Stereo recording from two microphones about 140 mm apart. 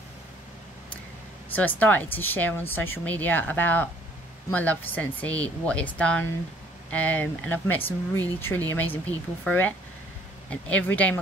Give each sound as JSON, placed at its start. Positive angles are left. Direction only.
{"t": 1.5, "sound": "speech", "side_deg": 10}